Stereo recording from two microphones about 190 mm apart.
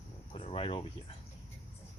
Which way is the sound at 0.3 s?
30° left (ahead or behind).